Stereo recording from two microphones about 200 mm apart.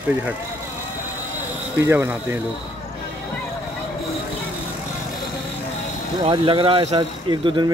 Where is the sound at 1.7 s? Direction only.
10° right (ahead or behind).